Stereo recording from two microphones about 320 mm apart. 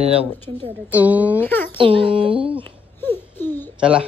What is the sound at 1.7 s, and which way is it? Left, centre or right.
Speech, centre.